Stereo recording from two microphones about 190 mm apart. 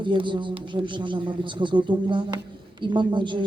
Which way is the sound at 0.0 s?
25° right (ahead or behind).